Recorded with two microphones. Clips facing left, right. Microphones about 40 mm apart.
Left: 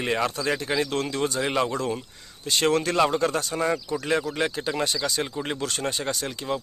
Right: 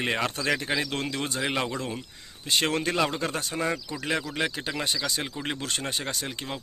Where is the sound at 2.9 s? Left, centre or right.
Centre.